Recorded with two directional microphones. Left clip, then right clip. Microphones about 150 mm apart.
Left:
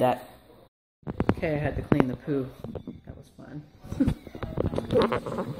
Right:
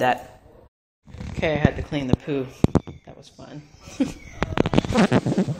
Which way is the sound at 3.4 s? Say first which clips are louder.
Right 3 dB; 10° left (ahead or behind).